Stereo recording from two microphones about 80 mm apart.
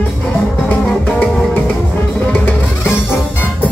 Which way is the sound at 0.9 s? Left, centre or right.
Centre.